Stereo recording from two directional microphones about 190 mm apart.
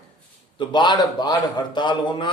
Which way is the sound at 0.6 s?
25° left (ahead or behind).